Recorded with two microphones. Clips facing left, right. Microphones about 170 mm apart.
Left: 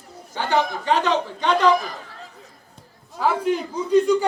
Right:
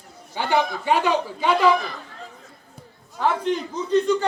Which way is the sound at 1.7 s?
40° left (ahead or behind).